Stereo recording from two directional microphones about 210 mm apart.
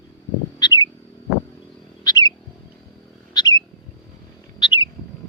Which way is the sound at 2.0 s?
20° left (ahead or behind).